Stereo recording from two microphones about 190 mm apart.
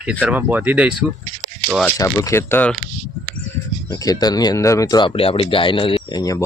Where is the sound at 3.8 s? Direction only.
20° left (ahead or behind).